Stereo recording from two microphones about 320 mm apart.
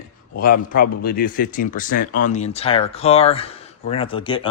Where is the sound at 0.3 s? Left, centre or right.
Left.